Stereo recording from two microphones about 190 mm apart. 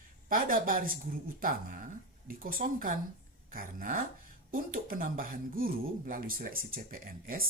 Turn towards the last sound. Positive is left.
turn(degrees=-50)  # may be behind; listen again after turning